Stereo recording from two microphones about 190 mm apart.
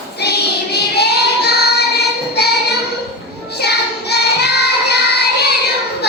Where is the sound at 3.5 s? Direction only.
60° left (ahead or behind).